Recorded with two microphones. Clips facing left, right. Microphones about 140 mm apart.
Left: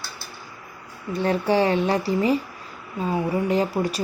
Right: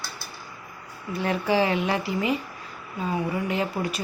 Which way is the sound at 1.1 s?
35° left (ahead or behind).